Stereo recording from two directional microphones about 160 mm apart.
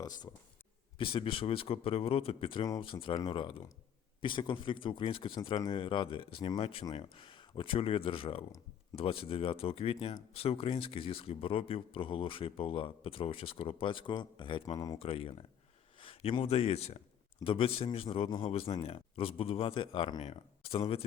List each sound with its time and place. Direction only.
0.9 s speech: 35° left (ahead or behind)
14.9 s speech: 35° left (ahead or behind)